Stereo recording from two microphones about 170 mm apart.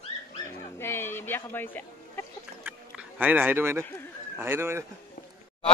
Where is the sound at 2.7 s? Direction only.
10° right (ahead or behind).